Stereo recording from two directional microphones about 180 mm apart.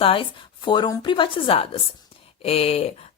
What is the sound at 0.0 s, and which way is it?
A woman's voice, 30° left (ahead or behind).